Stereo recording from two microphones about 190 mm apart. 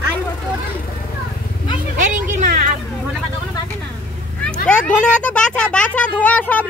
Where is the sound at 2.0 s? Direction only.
40° right (ahead or behind).